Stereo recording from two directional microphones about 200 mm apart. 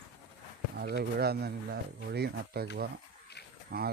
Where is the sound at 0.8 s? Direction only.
50° right (ahead or behind).